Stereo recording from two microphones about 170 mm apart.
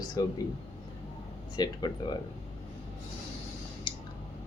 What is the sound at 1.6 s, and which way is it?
Speech, 25° left (ahead or behind).